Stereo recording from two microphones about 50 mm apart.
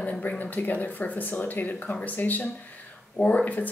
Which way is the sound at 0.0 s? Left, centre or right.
Left.